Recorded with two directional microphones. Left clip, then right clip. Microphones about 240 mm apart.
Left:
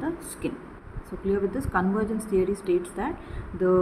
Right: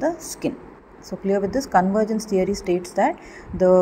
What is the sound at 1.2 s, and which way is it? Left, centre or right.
Speech, right.